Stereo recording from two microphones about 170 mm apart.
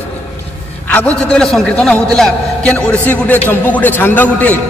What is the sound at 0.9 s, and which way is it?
A man's voice, 10° left (ahead or behind).